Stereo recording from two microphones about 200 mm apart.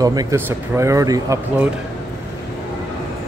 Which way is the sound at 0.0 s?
20° right (ahead or behind).